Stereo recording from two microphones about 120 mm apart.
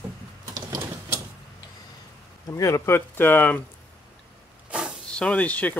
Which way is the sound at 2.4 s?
25° left (ahead or behind).